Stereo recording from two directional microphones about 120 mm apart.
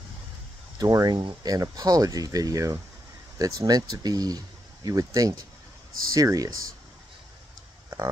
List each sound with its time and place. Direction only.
0.7 s speech: 30° right (ahead or behind)